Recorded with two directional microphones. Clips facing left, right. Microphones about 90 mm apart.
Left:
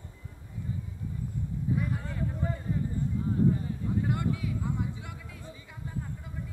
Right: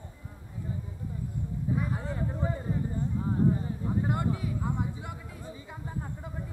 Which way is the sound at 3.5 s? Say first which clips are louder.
Even; 25° right (ahead or behind).